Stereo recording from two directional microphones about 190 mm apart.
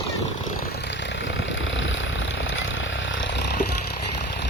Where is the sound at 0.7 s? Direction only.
70° left (ahead or behind).